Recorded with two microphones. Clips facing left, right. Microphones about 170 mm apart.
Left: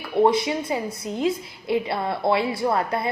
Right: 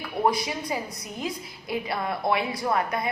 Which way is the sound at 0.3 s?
25° left (ahead or behind).